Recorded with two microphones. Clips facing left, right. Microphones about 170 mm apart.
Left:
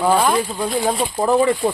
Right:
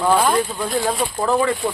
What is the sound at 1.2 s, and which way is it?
Speech, 20° left (ahead or behind).